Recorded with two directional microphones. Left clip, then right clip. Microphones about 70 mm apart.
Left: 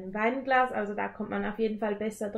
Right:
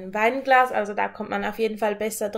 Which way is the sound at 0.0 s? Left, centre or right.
Right.